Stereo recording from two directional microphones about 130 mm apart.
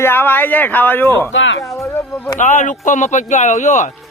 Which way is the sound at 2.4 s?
70° left (ahead or behind).